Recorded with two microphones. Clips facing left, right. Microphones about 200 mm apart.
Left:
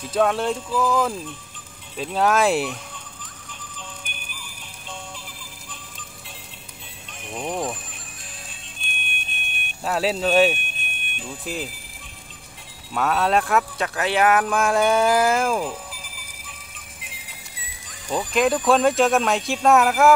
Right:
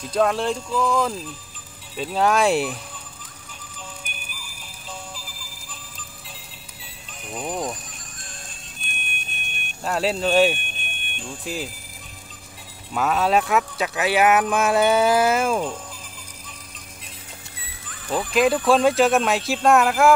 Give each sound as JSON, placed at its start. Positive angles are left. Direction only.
{"t": 0.0, "sound": "speech", "side_deg": 0}
{"t": 3.7, "sound": "music", "side_deg": -5}
{"t": 7.2, "sound": "speech", "side_deg": 0}
{"t": 8.8, "sound": "music", "side_deg": 0}
{"t": 9.8, "sound": "speech", "side_deg": 0}
{"t": 12.9, "sound": "speech", "side_deg": 0}
{"t": 17.8, "sound": "music", "side_deg": 15}
{"t": 18.3, "sound": "speech", "side_deg": 0}